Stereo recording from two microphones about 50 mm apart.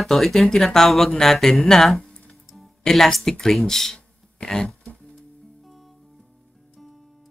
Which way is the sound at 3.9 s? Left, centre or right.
Centre.